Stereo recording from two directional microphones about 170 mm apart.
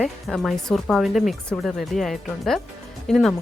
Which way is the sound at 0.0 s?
Centre (ahead or behind).